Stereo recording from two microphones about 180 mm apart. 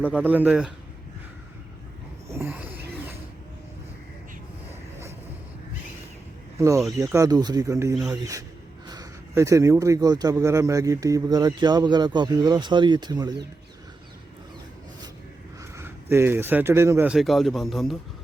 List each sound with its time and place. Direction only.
0.0 s speech: 10° right (ahead or behind)
2.3 s a sound: 10° right (ahead or behind)
6.6 s a man's voice: 15° right (ahead or behind)
15.7 s speech: 15° right (ahead or behind)